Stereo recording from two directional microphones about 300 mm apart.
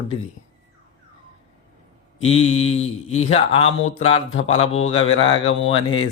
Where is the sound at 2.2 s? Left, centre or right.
Centre.